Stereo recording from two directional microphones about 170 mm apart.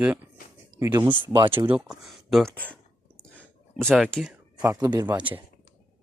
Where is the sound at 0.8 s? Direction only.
25° right (ahead or behind).